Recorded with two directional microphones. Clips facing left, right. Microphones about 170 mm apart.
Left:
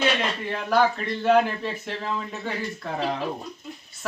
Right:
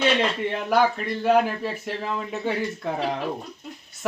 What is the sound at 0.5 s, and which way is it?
Speech, 15° right (ahead or behind).